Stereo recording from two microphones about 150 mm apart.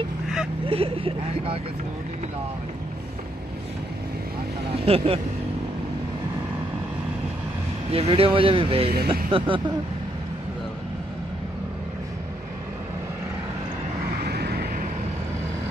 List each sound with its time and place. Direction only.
0.7 s speech: 40° right (ahead or behind)
4.8 s speech: 40° right (ahead or behind)
7.9 s speech: 40° right (ahead or behind)
8.9 s speech: 90° right
14.2 s vehicle: 90° right